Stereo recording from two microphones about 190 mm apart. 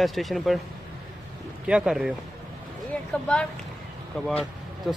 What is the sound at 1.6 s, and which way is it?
Speech, 5° right (ahead or behind).